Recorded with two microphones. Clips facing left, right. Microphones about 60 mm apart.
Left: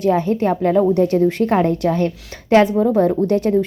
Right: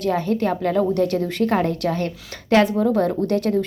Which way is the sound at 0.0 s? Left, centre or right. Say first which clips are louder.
Left 4 dB; left.